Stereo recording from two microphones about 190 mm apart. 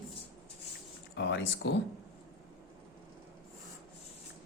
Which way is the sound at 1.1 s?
70° left (ahead or behind).